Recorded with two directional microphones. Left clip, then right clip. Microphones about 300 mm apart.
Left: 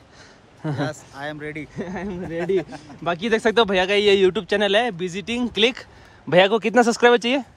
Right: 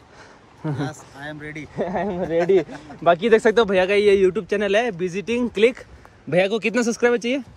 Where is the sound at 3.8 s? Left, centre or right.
Centre.